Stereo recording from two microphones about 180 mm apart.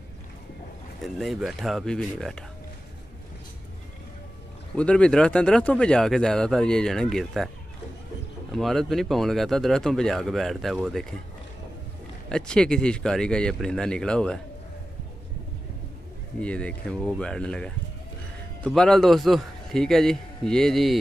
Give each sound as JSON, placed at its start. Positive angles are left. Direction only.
{"t": 1.0, "sound": "speech", "side_deg": 0}
{"t": 4.7, "sound": "speech", "side_deg": 5}
{"t": 8.5, "sound": "speech", "side_deg": 0}
{"t": 12.3, "sound": "speech", "side_deg": 5}
{"t": 16.3, "sound": "speech", "side_deg": 5}